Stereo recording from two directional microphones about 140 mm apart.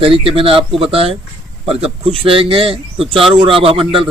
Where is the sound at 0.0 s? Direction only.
40° right (ahead or behind).